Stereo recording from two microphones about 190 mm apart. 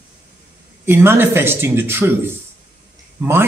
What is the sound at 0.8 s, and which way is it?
A man's voice, 10° right (ahead or behind).